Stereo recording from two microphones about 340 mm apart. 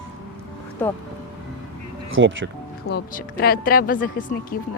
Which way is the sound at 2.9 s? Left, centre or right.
Left.